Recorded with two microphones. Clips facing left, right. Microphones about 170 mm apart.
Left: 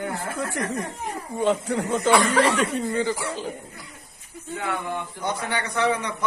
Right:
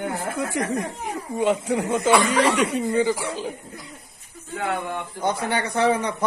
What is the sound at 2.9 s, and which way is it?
Speech, 15° right (ahead or behind).